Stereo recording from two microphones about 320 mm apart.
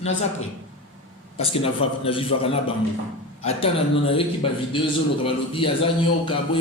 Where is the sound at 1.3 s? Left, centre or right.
Centre.